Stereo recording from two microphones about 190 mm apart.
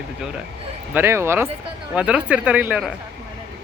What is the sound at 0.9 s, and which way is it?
Speech, 15° right (ahead or behind).